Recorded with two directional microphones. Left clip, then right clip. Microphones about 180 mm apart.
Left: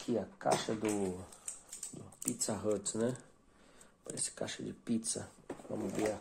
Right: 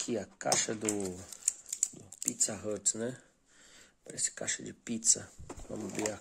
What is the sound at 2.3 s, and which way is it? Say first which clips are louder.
Speech: left 1 dB; 25° right (ahead or behind).